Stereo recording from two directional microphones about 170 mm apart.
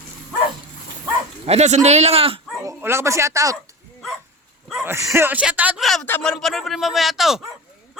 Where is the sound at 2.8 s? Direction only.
15° right (ahead or behind).